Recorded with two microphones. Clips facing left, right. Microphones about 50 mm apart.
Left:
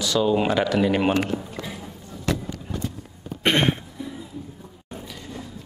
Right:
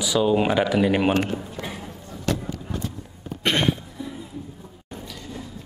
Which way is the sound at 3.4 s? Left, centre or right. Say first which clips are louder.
Left 2 dB; left.